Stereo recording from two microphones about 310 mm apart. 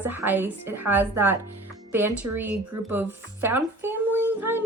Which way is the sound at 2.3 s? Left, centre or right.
Right.